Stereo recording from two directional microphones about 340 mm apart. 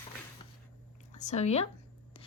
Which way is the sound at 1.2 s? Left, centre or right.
Centre.